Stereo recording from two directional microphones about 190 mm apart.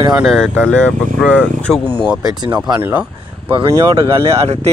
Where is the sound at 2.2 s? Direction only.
20° right (ahead or behind).